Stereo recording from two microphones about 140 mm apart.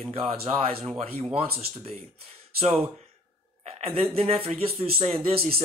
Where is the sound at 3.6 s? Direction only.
45° right (ahead or behind).